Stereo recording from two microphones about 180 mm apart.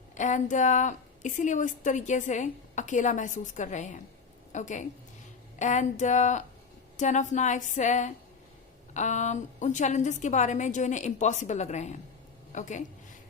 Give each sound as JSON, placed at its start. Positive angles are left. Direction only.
{"t": 0.1, "sound": "a woman's voice", "side_deg": 45}